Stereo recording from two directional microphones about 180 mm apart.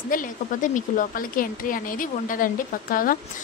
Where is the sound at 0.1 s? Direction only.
45° left (ahead or behind).